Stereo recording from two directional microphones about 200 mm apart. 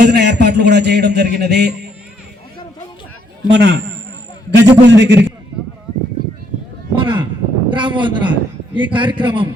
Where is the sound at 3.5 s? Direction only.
60° right (ahead or behind).